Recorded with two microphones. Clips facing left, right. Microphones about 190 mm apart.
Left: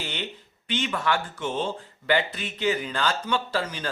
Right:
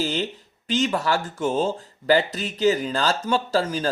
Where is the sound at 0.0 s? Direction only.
40° right (ahead or behind).